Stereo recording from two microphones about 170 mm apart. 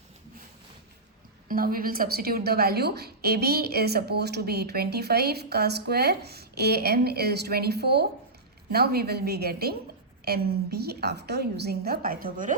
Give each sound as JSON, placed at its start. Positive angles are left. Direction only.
{"t": 1.5, "sound": "a woman's voice", "side_deg": -60}